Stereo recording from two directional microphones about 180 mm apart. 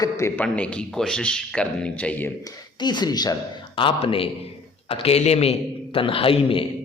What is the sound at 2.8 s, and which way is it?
Speech, 25° left (ahead or behind).